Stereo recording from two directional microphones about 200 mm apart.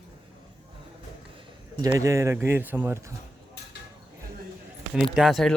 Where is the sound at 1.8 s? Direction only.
15° right (ahead or behind).